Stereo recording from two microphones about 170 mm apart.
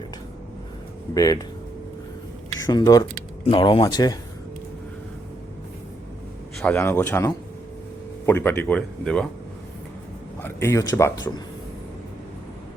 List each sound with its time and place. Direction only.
1.1 s speech: 20° left (ahead or behind)
2.6 s speech: 25° left (ahead or behind)
6.6 s speech: 10° left (ahead or behind)
8.3 s speech: 10° left (ahead or behind)
10.4 s speech: 15° left (ahead or behind)